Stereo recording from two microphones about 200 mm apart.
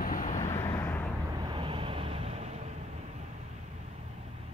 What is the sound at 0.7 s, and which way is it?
Vehicle, 10° left (ahead or behind).